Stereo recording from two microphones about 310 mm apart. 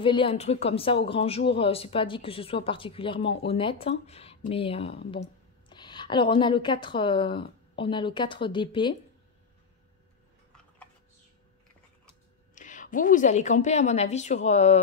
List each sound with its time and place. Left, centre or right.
0.0 s speech: centre
12.5 s a woman's voice: left